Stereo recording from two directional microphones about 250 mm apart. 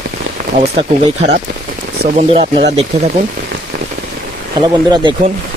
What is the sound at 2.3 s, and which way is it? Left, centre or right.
Speech, right.